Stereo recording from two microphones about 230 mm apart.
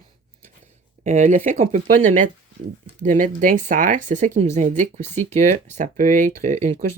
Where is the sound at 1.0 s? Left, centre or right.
Right.